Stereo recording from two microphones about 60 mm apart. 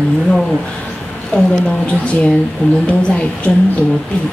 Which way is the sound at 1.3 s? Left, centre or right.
Centre.